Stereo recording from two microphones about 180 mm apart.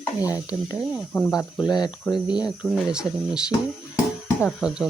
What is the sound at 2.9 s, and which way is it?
Sizzle, 5° right (ahead or behind).